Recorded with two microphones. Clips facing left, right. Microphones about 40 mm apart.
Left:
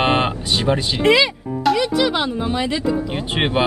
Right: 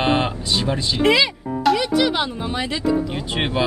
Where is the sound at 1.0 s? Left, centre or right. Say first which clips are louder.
Left 1 dB; centre.